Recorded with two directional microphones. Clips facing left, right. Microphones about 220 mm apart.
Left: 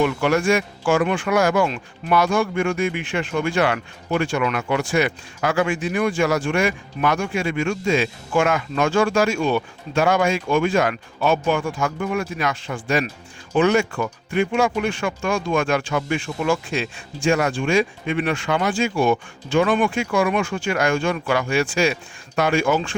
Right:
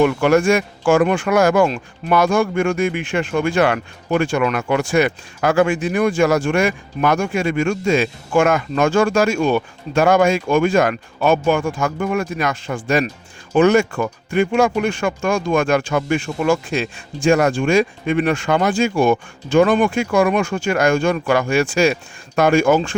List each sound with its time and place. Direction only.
0.0 s speech: 50° right (ahead or behind)